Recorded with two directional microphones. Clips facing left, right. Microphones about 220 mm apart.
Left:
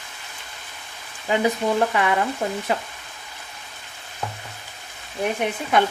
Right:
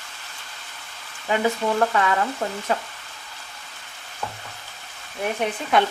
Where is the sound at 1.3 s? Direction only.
15° left (ahead or behind).